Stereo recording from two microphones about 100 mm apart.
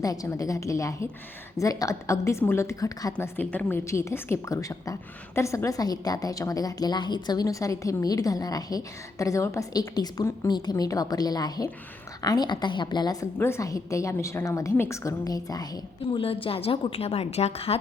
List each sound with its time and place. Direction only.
0.0 s a woman's voice: 35° left (ahead or behind)
3.2 s a woman's voice: 20° left (ahead or behind); by 13.2 s 45° left (ahead or behind)
13.4 s a woman's voice: 30° left (ahead or behind)
16.1 s a woman's voice: 70° left (ahead or behind); by 17.7 s 90° left